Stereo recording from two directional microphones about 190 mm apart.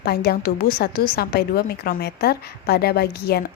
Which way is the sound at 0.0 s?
55° left (ahead or behind).